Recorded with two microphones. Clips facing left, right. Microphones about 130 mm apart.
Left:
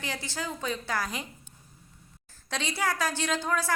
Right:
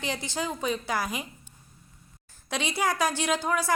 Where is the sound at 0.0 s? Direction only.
20° right (ahead or behind).